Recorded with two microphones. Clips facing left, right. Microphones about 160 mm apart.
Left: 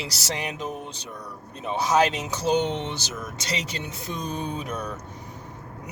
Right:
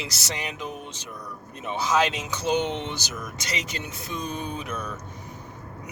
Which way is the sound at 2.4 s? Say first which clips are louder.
Left 2 dB; 35° left (ahead or behind).